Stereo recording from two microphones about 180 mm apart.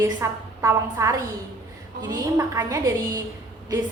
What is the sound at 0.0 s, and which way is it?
A woman's voice, 15° right (ahead or behind).